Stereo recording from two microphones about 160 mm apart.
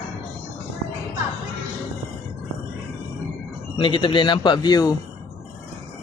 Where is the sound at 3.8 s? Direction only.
30° left (ahead or behind).